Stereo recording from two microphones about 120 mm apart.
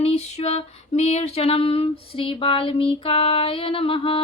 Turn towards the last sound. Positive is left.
turn(degrees=45)  # may be behind; listen again after turning